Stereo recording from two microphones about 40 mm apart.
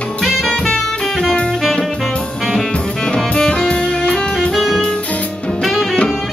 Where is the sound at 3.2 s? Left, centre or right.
Left.